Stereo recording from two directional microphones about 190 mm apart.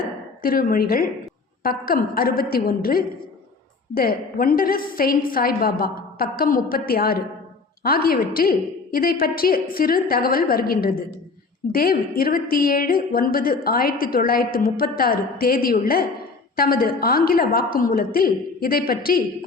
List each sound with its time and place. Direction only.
0.4 s a woman's voice: 50° left (ahead or behind)